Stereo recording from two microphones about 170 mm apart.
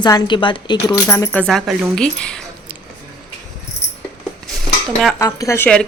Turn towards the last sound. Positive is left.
turn(degrees=20)  # may be behind; listen again after turning